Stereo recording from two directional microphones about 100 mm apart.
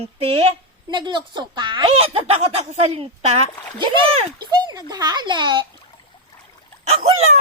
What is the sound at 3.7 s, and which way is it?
Speech, 55° right (ahead or behind).